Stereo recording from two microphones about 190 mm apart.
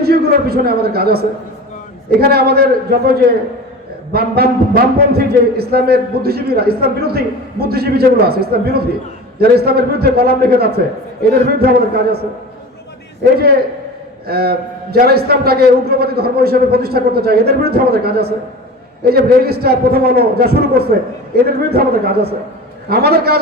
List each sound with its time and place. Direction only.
0.0 s a man's voice: 55° right (ahead or behind)
14.3 s a man's voice: 55° right (ahead or behind)